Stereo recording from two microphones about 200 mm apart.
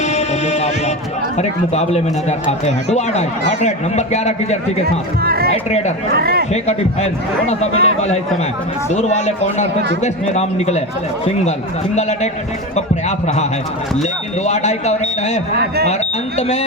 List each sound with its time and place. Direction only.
0.0 s music: 35° left (ahead or behind)
1.4 s a man's voice: 35° left (ahead or behind)
4.9 s speech: 50° right (ahead or behind)
5.5 s a man's voice: 35° left (ahead or behind)
6.1 s speech: 50° right (ahead or behind)
6.5 s a man's voice: 35° left (ahead or behind)
12.7 s a man's voice: 35° left (ahead or behind)
15.5 s speech: 55° right (ahead or behind)